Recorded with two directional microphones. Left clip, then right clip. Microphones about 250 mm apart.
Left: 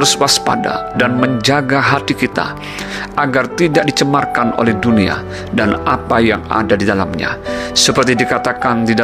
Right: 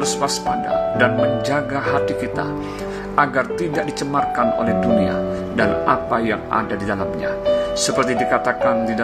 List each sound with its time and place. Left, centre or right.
0.0 s speech: left